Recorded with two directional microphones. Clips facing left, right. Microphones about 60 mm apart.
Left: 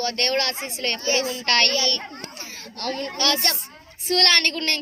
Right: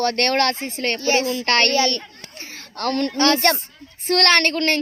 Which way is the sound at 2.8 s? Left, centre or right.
Right.